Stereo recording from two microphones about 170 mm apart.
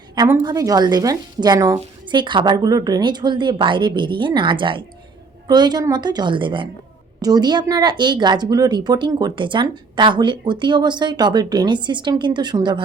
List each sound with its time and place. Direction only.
0.4 s a woman's voice: 20° right (ahead or behind)